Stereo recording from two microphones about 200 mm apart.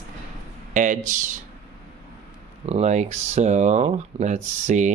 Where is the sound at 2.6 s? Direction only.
35° right (ahead or behind).